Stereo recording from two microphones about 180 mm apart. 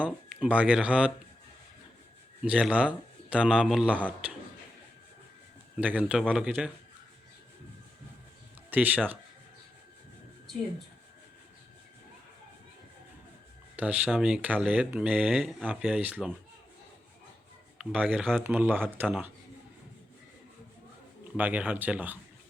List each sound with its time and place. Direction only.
0.0 s speech: 5° right (ahead or behind)
2.4 s speech: 5° right (ahead or behind)
5.7 s speech: 10° right (ahead or behind)
8.7 s speech: 10° right (ahead or behind)
13.7 s speech: 5° right (ahead or behind)
17.7 s speech: 5° right (ahead or behind)
21.3 s speech: 10° right (ahead or behind)